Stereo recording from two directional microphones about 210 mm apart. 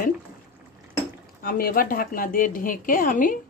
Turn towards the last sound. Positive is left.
turn(degrees=40)  # may be behind; listen again after turning